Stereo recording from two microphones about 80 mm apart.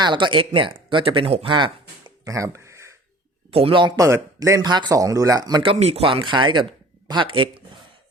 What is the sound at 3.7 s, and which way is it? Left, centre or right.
Speech, right.